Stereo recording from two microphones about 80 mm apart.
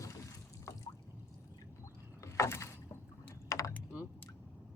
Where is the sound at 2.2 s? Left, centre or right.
Left.